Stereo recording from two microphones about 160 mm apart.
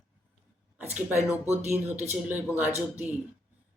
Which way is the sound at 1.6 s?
45° right (ahead or behind).